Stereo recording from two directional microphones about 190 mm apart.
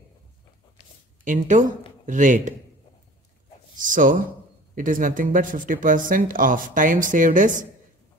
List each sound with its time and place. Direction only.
1.2 s speech: 40° right (ahead or behind)
3.7 s speech: 45° right (ahead or behind)